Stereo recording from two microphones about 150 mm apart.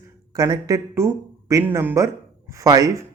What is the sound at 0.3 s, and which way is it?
Speech, 25° right (ahead or behind).